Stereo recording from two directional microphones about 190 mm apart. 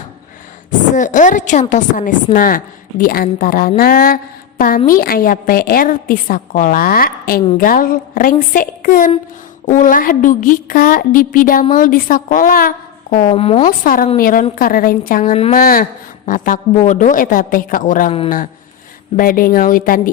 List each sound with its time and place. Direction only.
0.9 s a woman's voice: 45° left (ahead or behind)
3.8 s a sound: 50° left (ahead or behind)
4.9 s a woman's voice: 50° left (ahead or behind)
13.2 s a woman's voice: 30° left (ahead or behind)
13.7 s a woman's voice: 45° left (ahead or behind)
19.1 s a woman's voice: 45° left (ahead or behind)